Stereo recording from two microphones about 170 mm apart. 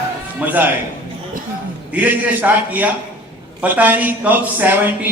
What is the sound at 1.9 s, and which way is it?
A man's voice, 10° right (ahead or behind).